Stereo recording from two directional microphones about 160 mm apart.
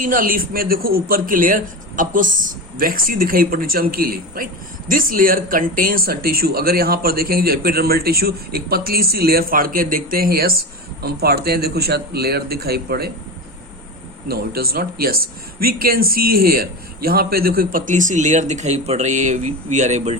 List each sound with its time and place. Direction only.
0.0 s a man's voice: 60° right (ahead or behind); by 13.1 s 75° right (ahead or behind)
14.3 s a man's voice: 70° right (ahead or behind); by 20.1 s 45° right (ahead or behind)